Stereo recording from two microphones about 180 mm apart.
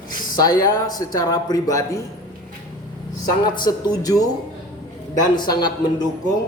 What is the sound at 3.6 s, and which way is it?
Speech, 20° left (ahead or behind).